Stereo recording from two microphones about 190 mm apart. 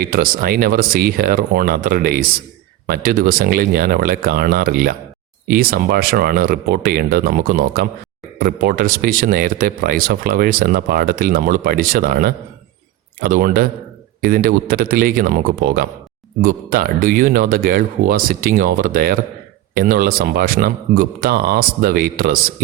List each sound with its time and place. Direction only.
0.0 s speech: 50° right (ahead or behind)